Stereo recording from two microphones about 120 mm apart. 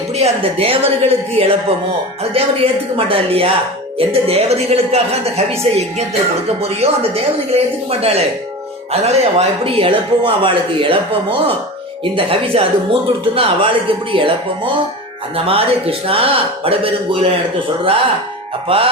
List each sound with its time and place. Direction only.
0.1 s a woman's voice: 60° right (ahead or behind)
18.7 s speech: 50° right (ahead or behind)